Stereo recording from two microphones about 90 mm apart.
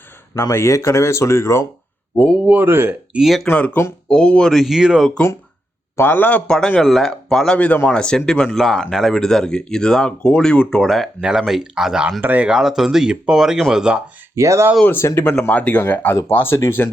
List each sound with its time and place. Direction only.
0.3 s speech: 30° left (ahead or behind)
2.1 s speech: 15° left (ahead or behind)
2.6 s speech: 25° right (ahead or behind)
3.1 s speech: 5° right (ahead or behind)
3.4 s speech: 15° left (ahead or behind); by 5.1 s 5° right (ahead or behind)
6.0 s speech: 20° left (ahead or behind); by 11.1 s 5° left (ahead or behind)
11.2 s speech: 5° right (ahead or behind)
12.2 s speech: 20° right (ahead or behind)
12.5 s speech: 5° right (ahead or behind)
14.3 s speech: 35° right (ahead or behind)
14.8 s speech: 30° left (ahead or behind)
15.4 s speech: 15° left (ahead or behind)